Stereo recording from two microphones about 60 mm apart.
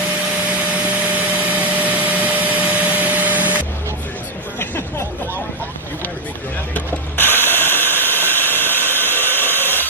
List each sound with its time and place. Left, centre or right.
0.9 s vacuum cleaner: right
4.6 s a sound: left
6.7 s ratchet: left